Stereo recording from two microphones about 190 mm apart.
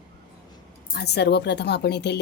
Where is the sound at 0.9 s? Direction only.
60° left (ahead or behind).